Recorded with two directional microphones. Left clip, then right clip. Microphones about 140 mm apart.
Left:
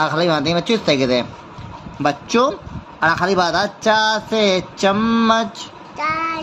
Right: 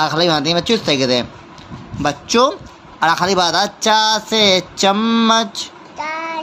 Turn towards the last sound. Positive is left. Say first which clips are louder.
# left 3 dB
turn(degrees=50)  # may be behind; listen again after turning